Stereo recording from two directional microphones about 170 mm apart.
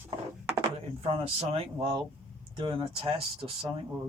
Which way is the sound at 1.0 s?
35° right (ahead or behind).